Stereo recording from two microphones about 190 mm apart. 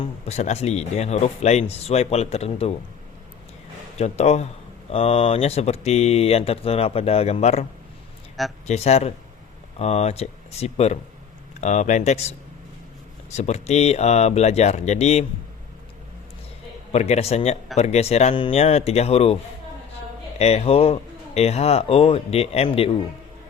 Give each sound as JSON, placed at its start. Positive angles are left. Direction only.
{"t": 0.0, "sound": "speech", "side_deg": 35}
{"t": 3.9, "sound": "speech", "side_deg": 35}
{"t": 8.6, "sound": "speech", "side_deg": 35}
{"t": 16.9, "sound": "speech", "side_deg": 35}
{"t": 20.4, "sound": "speech", "side_deg": 35}